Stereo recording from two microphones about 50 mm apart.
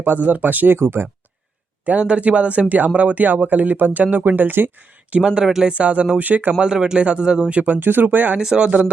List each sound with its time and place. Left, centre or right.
0.0 s speech: right
0.8 s speech: right
2.0 s speech: right
5.2 s speech: centre
6.6 s a man's voice: centre
7.5 s speech: right
8.4 s a man's voice: centre